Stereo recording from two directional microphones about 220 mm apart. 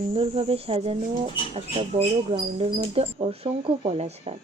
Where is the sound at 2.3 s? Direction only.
25° right (ahead or behind).